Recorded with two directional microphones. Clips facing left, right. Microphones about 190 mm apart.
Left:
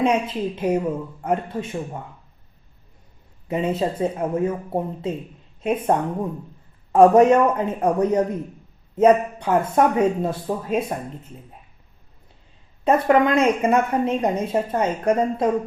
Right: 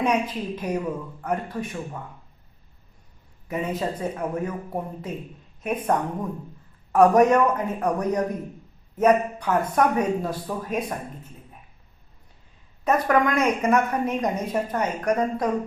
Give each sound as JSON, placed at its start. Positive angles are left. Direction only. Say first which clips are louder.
{"t": 0.0, "sound": "a woman's voice", "louder": "left 3 dB", "side_deg": 25}
{"t": 3.5, "sound": "a woman's voice", "louder": "left 4 dB", "side_deg": 25}
{"t": 12.8, "sound": "a woman's voice", "louder": "left 4 dB", "side_deg": 30}